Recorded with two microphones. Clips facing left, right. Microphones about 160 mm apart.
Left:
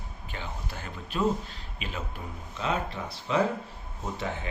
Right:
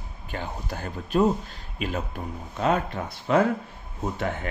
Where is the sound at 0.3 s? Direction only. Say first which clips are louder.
Right 6 dB; 45° right (ahead or behind).